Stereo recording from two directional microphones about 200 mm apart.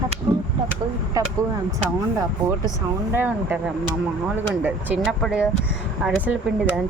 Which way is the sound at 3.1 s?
10° right (ahead or behind).